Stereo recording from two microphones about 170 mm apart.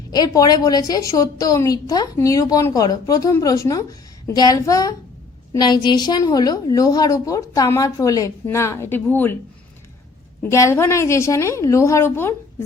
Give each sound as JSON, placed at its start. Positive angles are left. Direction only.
{"t": 0.1, "sound": "a woman's voice", "side_deg": 25}
{"t": 10.4, "sound": "a woman's voice", "side_deg": 15}